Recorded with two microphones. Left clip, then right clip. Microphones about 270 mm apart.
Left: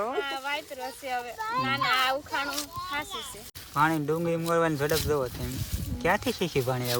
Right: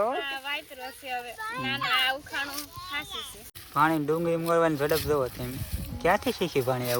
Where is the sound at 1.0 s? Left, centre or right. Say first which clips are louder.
Left 2 dB; left.